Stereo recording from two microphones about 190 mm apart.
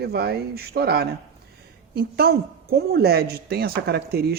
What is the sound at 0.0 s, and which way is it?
A woman's voice, 55° right (ahead or behind).